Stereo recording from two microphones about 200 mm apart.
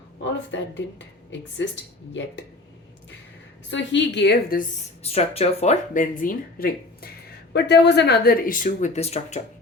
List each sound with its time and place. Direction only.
0.3 s speech: 65° left (ahead or behind)
3.7 s speech: 65° left (ahead or behind)
5.0 s speech: 30° left (ahead or behind)
7.5 s speech: 55° left (ahead or behind); by 9.4 s 30° left (ahead or behind)